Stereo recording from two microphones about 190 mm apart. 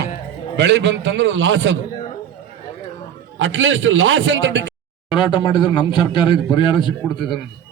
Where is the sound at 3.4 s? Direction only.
90° right; by 4.7 s 75° right (ahead or behind).